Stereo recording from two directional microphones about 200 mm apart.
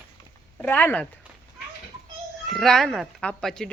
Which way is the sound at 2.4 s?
Centre (ahead or behind).